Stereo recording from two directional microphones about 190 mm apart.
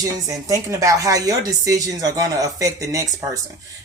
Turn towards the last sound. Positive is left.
turn(degrees=-15)  # may be behind; listen again after turning